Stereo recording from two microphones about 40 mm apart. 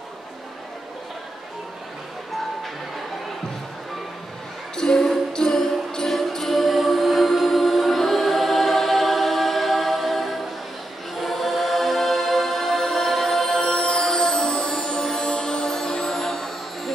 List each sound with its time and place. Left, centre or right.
4.7 s music: centre
6.1 s music: centre